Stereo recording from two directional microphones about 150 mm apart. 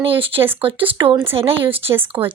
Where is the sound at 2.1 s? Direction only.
20° right (ahead or behind).